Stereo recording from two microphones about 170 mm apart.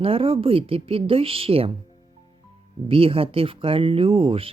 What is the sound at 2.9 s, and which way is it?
Speech, 30° right (ahead or behind).